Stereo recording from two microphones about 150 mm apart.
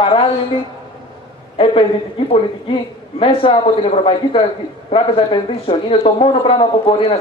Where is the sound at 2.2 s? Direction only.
35° left (ahead or behind).